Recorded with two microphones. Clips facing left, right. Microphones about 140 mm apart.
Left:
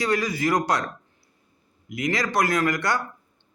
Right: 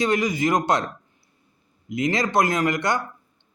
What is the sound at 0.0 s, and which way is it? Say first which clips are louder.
Speech: right 2 dB; 20° right (ahead or behind).